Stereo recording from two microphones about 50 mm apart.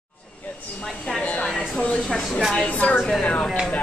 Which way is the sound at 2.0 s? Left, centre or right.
Centre.